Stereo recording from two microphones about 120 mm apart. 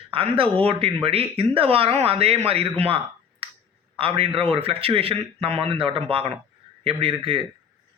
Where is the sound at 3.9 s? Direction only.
50° right (ahead or behind).